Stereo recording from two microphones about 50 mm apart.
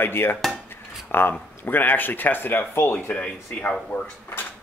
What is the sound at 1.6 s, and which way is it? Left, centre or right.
Speech, left.